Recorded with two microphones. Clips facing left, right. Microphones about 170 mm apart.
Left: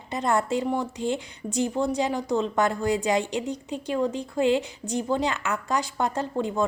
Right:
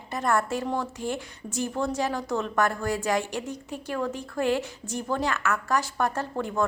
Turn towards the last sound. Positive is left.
turn(degrees=15)  # may be behind; listen again after turning